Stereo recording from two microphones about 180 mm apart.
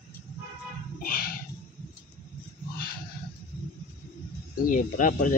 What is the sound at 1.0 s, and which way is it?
Music, 55° left (ahead or behind).